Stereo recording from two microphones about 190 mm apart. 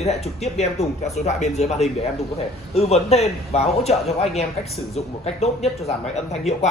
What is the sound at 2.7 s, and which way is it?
Speech, 35° left (ahead or behind).